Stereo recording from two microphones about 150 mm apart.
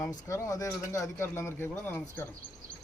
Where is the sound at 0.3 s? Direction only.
20° left (ahead or behind).